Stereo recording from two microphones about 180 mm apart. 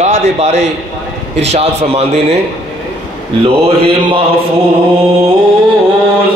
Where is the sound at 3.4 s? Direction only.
30° right (ahead or behind).